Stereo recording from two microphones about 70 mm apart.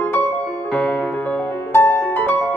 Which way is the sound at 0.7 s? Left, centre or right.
Centre.